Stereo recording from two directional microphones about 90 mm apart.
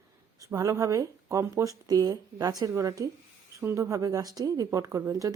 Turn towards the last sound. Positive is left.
turn(degrees=-40)  # may be behind; listen again after turning